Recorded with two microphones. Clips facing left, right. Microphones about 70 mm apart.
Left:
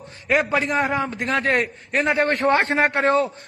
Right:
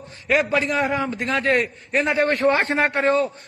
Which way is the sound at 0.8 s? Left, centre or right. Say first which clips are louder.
Even; left.